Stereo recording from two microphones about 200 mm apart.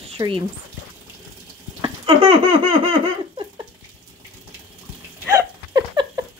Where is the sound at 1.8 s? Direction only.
25° right (ahead or behind).